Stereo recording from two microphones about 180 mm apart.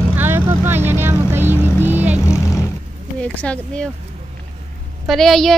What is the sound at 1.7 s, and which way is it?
Vehicle, 10° right (ahead or behind).